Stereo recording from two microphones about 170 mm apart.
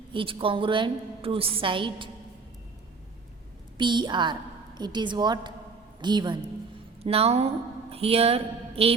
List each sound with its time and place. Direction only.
0.1 s a woman's voice: 30° right (ahead or behind)
3.8 s a woman's voice: 25° right (ahead or behind)
7.0 s a woman's voice: 35° right (ahead or behind)